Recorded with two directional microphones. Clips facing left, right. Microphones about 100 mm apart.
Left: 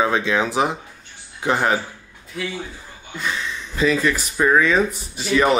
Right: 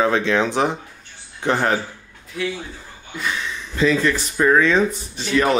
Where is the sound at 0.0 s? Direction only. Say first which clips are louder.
Right 1 dB; 10° left (ahead or behind).